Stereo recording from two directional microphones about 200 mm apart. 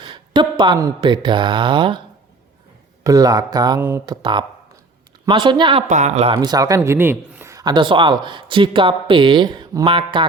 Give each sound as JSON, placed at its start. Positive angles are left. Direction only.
{"t": 0.0, "sound": "speech", "side_deg": -25}
{"t": 3.0, "sound": "speech", "side_deg": -15}
{"t": 5.9, "sound": "speech", "side_deg": -35}